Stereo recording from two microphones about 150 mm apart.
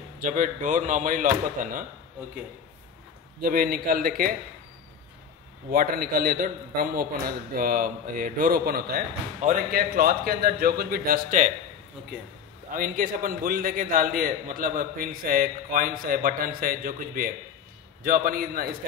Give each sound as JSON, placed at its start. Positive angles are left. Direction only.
{"t": 0.2, "sound": "speech", "side_deg": -60}
{"t": 3.3, "sound": "a man's voice", "side_deg": -75}
{"t": 5.7, "sound": "a man's voice", "side_deg": -75}
{"t": 12.7, "sound": "a man's voice", "side_deg": -65}